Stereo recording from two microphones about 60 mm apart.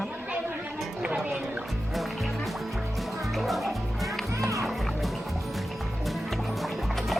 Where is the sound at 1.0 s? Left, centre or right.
Centre.